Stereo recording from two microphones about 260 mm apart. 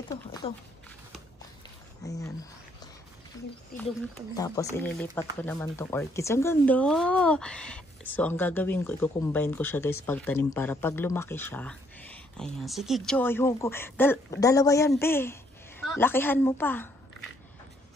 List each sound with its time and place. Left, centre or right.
0.1 s speech: centre
2.0 s speech: centre
3.7 s speech: left
4.4 s speech: centre